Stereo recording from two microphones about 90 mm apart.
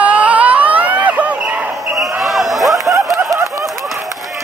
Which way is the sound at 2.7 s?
35° right (ahead or behind).